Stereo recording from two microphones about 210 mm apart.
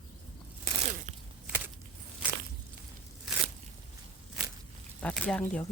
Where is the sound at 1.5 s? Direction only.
10° right (ahead or behind).